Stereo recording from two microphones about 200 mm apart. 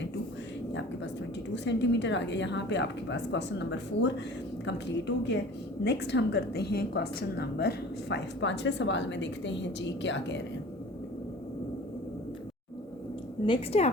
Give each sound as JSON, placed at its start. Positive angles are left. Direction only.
{"t": 1.5, "sound": "a woman's voice", "side_deg": 60}
{"t": 13.4, "sound": "a woman's voice", "side_deg": 30}